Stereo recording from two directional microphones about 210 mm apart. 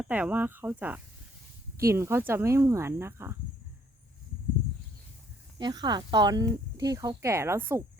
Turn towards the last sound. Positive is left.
turn(degrees=-10)  # may be behind; listen again after turning